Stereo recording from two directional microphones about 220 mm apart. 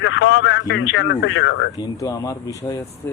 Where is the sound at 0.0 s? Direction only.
55° left (ahead or behind).